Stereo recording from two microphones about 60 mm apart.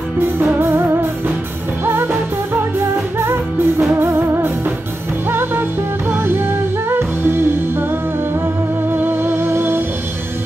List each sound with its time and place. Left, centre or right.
0.2 s music: right
2.5 s music: right
8.9 s music: right